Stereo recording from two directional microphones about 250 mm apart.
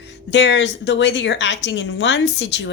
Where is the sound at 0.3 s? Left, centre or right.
Left.